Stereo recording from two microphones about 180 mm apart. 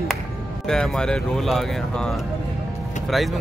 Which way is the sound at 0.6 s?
5° left (ahead or behind).